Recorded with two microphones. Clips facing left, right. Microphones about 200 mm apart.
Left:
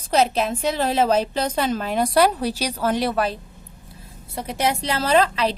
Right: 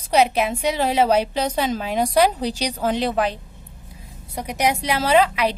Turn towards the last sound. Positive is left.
turn(degrees=-10)  # may be behind; listen again after turning